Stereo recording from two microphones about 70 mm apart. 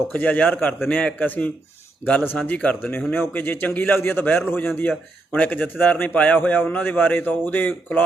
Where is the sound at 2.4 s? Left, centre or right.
Centre.